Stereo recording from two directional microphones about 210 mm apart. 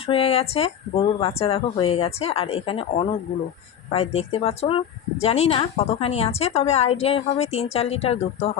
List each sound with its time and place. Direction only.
0.1 s a woman's voice: 30° left (ahead or behind)